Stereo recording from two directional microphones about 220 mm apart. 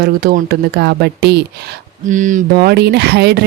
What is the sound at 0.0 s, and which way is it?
Speech, 45° right (ahead or behind).